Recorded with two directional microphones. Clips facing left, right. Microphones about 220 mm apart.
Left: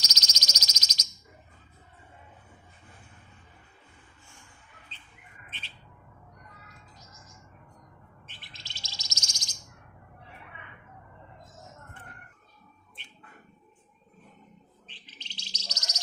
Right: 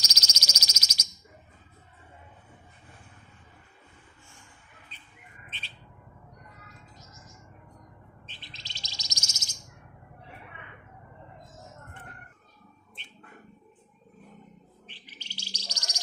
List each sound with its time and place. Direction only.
0.0 s a sound: 10° right (ahead or behind)
8.4 s bird: 20° right (ahead or behind)
9.3 s bird: 5° right (ahead or behind)
14.8 s bird: 10° right (ahead or behind)